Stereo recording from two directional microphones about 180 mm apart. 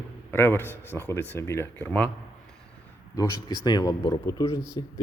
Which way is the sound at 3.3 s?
25° right (ahead or behind).